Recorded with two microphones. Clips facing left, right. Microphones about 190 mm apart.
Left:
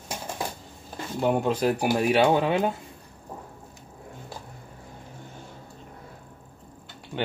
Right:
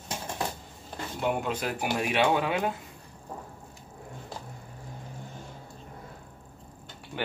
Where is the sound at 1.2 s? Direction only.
35° left (ahead or behind).